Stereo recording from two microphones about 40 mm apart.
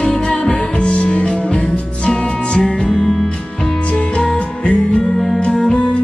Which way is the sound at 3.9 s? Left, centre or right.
Left.